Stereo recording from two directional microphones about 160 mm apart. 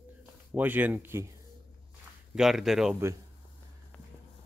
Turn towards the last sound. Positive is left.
turn(degrees=5)  # may be behind; listen again after turning